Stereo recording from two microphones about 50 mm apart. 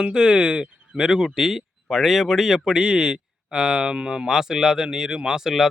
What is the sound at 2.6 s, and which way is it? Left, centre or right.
Speech, centre.